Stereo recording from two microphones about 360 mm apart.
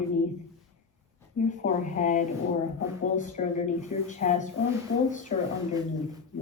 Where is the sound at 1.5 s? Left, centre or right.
Centre.